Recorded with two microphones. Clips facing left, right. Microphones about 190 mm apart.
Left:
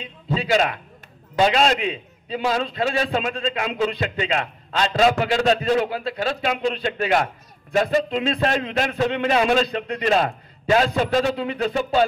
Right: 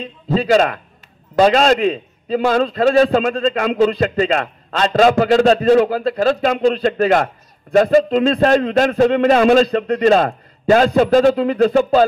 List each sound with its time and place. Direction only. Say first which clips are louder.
0.0 s a man's voice: right 7 dB; 40° right (ahead or behind)